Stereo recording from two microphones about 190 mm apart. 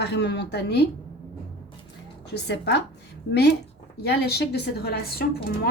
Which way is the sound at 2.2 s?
60° left (ahead or behind).